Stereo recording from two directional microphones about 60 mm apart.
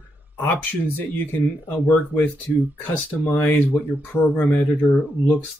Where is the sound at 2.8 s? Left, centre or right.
Left.